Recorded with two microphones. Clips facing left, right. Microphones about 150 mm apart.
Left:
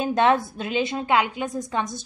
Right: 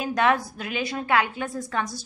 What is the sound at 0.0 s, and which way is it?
A woman's voice, 25° left (ahead or behind).